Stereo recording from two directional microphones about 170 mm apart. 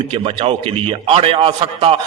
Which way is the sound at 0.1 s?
30° right (ahead or behind).